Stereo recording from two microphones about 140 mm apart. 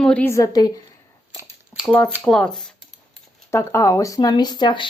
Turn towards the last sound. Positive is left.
turn(degrees=30)  # may be behind; listen again after turning